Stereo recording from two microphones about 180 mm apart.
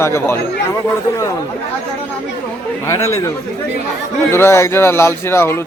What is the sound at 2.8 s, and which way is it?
A man's voice, 15° left (ahead or behind).